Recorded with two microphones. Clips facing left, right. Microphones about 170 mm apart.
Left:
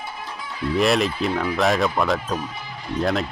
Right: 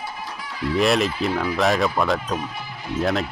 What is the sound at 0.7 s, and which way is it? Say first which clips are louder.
Speech: even; centre (ahead or behind).